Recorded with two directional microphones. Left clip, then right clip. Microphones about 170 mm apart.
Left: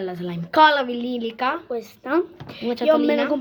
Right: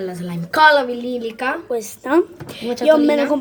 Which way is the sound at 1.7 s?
5° right (ahead or behind).